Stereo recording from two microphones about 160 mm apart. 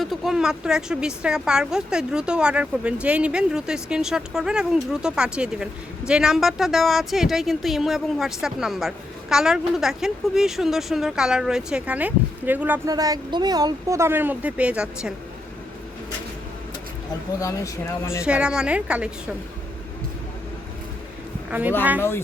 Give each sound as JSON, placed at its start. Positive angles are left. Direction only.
{"t": 0.0, "sound": "speech", "side_deg": 0}
{"t": 12.9, "sound": "speech", "side_deg": -25}
{"t": 17.4, "sound": "speech", "side_deg": 20}
{"t": 18.2, "sound": "speech", "side_deg": -5}